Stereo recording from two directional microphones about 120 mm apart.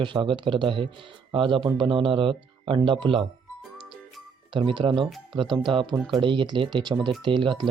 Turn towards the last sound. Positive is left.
turn(degrees=-40)  # may be behind; listen again after turning